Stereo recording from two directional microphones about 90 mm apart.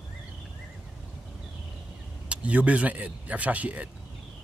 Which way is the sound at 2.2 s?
15° right (ahead or behind).